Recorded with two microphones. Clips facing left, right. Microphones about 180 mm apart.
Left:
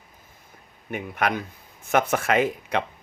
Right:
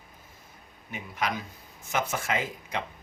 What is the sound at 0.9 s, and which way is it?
Speech, 60° left (ahead or behind).